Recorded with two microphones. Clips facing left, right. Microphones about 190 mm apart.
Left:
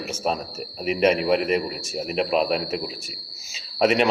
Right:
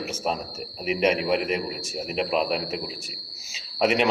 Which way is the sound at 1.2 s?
50° left (ahead or behind).